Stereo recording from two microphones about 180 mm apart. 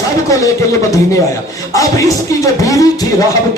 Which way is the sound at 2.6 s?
20° left (ahead or behind).